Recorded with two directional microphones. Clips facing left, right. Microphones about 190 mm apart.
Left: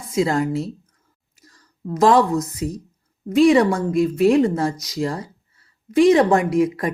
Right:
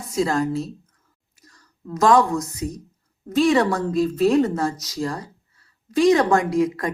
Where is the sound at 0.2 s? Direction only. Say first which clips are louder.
Left 2 dB; 20° left (ahead or behind).